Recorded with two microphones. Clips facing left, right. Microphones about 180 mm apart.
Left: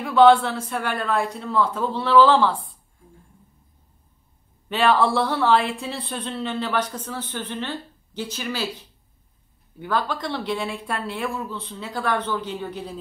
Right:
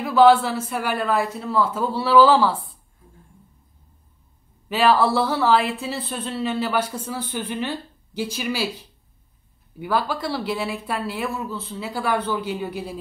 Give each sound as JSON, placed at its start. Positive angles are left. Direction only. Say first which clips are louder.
{"t": 0.0, "sound": "speech", "louder": "even", "side_deg": -5}
{"t": 4.6, "sound": "speech", "louder": "right 1 dB", "side_deg": -5}